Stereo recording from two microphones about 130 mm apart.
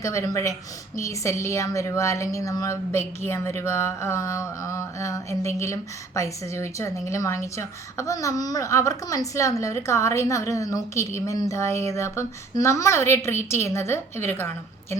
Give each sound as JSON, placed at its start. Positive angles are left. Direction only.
{"t": 0.0, "sound": "a woman's voice", "side_deg": 25}